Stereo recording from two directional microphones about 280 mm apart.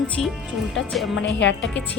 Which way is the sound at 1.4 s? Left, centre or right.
Left.